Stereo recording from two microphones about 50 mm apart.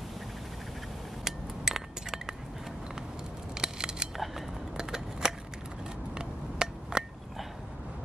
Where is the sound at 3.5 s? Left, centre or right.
Centre.